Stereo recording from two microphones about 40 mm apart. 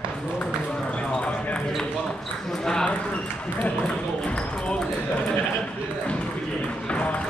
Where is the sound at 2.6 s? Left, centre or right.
Centre.